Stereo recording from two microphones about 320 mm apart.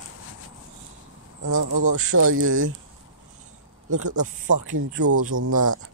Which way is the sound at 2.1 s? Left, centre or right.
Right.